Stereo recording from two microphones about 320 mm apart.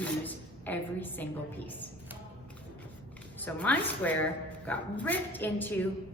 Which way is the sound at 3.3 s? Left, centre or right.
Centre.